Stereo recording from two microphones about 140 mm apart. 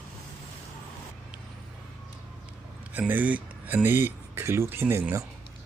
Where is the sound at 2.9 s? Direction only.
10° right (ahead or behind).